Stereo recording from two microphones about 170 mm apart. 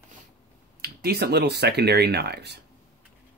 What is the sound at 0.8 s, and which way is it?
Speech, 70° right (ahead or behind).